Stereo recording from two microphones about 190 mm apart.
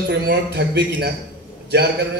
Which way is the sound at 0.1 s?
60° right (ahead or behind).